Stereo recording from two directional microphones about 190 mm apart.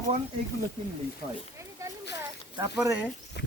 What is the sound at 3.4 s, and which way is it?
Speech, 65° left (ahead or behind).